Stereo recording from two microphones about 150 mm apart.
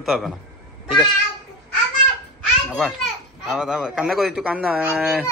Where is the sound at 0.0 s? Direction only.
Centre (ahead or behind).